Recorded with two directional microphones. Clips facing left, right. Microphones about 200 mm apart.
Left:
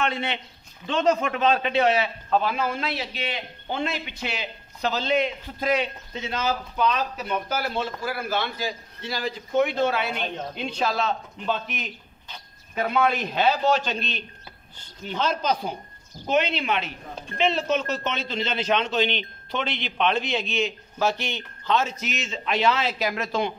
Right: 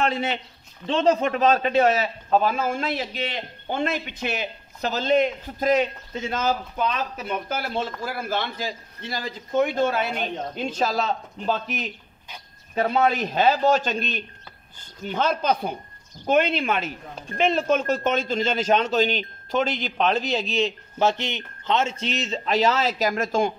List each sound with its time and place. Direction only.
0.0 s a man's voice: 40° right (ahead or behind)
8.0 s a man's voice: 50° right (ahead or behind)
21.0 s speech: 20° right (ahead or behind); by 23.5 s 45° right (ahead or behind)